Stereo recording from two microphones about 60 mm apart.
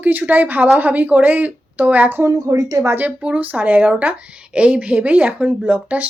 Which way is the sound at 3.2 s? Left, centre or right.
Right.